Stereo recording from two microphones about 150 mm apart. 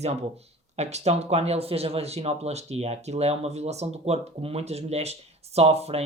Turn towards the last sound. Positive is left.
turn(degrees=-45)  # may be behind; listen again after turning